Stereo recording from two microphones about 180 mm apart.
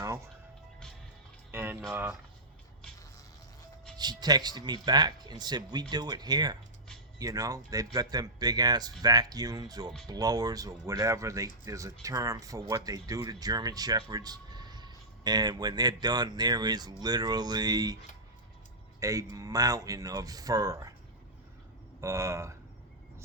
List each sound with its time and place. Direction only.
1.5 s music: 10° right (ahead or behind)
1.9 s speech: 10° right (ahead or behind)
3.9 s speech: 25° right (ahead or behind)
18.9 s speech: 20° right (ahead or behind)
22.0 s speech: 15° right (ahead or behind)